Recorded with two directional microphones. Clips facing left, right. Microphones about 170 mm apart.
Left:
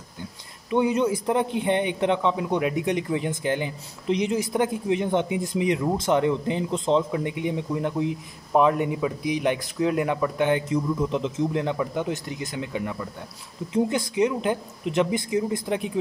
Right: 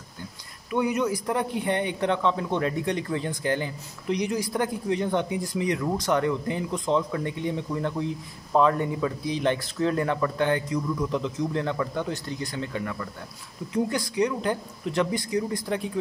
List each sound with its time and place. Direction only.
0.7 s a man's voice: 25° left (ahead or behind)